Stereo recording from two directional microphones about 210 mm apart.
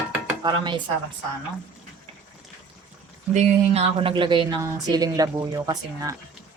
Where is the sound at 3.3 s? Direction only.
30° right (ahead or behind).